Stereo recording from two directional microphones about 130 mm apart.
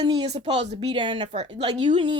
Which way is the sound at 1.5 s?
40° right (ahead or behind).